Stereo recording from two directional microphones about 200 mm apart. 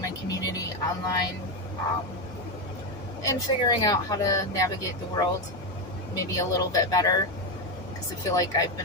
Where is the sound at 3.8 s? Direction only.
15° left (ahead or behind).